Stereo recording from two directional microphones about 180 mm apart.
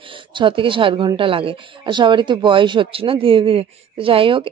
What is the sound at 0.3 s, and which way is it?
A woman's voice, 25° right (ahead or behind).